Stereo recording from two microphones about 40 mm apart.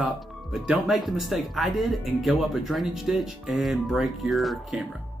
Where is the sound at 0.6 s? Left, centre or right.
Centre.